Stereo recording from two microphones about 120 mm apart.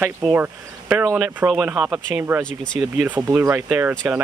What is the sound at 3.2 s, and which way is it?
Speech, 20° right (ahead or behind).